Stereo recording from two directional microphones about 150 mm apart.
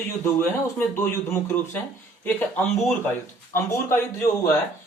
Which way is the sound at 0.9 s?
15° left (ahead or behind).